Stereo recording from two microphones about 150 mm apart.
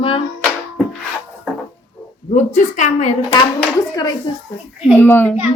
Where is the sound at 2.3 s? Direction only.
55° left (ahead or behind).